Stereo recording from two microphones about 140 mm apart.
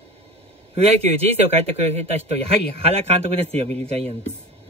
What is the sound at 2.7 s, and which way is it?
Speech, 45° right (ahead or behind).